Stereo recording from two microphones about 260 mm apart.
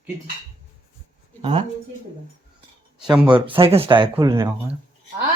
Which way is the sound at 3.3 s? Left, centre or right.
Centre.